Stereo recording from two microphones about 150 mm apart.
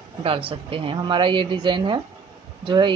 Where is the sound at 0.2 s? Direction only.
40° right (ahead or behind).